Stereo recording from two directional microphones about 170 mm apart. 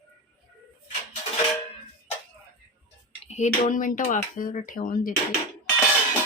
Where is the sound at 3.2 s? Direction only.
45° left (ahead or behind).